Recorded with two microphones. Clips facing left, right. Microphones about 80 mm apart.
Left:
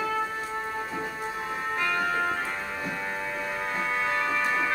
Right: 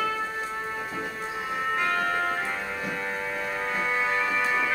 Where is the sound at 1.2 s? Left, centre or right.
Centre.